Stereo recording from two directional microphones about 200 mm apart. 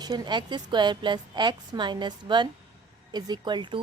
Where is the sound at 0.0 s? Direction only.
20° right (ahead or behind).